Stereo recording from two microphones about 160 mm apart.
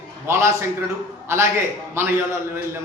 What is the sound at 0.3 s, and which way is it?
Speech, 15° right (ahead or behind).